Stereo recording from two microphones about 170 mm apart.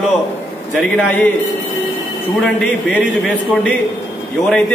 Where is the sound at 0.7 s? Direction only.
5° left (ahead or behind).